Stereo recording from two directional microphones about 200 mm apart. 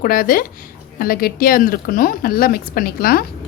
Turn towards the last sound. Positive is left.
turn(degrees=50)  # may be behind; listen again after turning